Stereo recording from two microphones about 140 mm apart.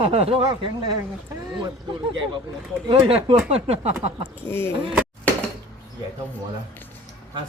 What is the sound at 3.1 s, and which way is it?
Speech, 45° right (ahead or behind).